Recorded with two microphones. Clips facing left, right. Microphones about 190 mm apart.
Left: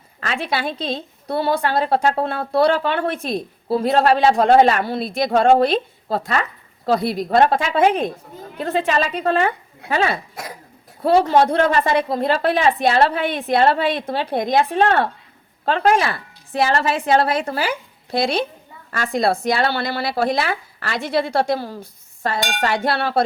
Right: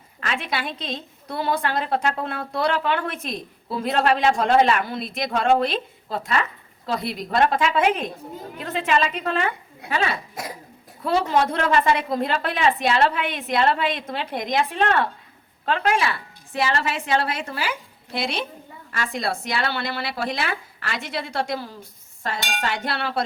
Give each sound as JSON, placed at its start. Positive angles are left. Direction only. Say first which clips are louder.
{"t": 0.2, "sound": "a woman's voice", "louder": "left 4 dB", "side_deg": 35}
{"t": 18.9, "sound": "a woman's voice", "louder": "left 4 dB", "side_deg": 50}
{"t": 19.1, "sound": "a woman's voice", "louder": "left 9 dB", "side_deg": 35}